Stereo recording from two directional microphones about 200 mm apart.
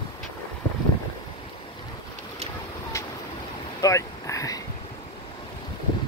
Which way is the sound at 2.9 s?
15° left (ahead or behind).